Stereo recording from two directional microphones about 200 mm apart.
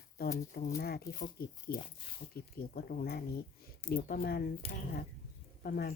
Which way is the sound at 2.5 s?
50° left (ahead or behind).